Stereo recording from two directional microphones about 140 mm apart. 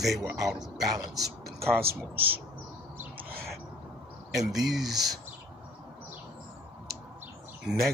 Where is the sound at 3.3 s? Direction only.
90° right.